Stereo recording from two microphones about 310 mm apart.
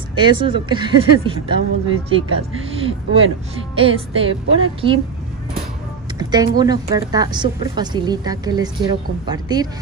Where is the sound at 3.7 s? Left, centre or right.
Centre.